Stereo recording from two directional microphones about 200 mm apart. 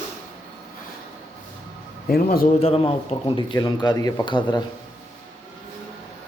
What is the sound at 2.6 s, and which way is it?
A man's voice, 30° left (ahead or behind).